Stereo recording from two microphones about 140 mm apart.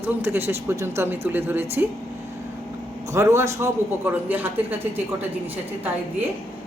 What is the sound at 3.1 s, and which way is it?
Speech, 20° right (ahead or behind).